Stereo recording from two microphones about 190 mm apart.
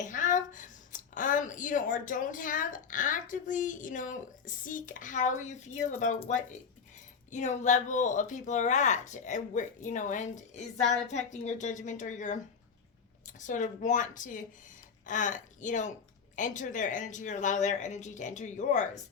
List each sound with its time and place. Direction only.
0.0 s a woman's voice: 40° left (ahead or behind)